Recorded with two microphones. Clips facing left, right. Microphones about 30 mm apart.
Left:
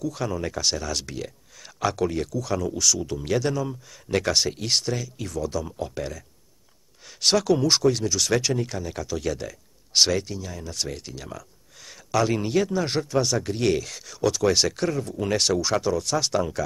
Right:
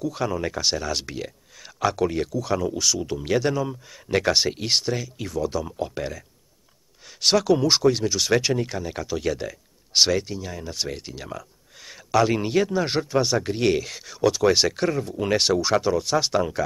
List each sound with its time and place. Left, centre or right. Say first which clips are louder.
0.0 s speech: right 2 dB; centre